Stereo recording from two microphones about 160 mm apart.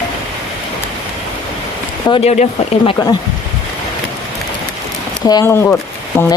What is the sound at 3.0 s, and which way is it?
Speech, 20° left (ahead or behind).